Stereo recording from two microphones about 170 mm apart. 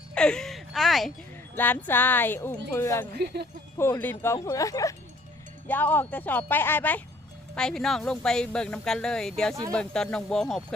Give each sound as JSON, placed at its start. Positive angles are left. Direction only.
{"t": 0.1, "sound": "speech", "side_deg": 5}
{"t": 1.5, "sound": "a woman's voice", "side_deg": 10}
{"t": 3.2, "sound": "speech", "side_deg": -75}
{"t": 3.8, "sound": "a woman's voice", "side_deg": 10}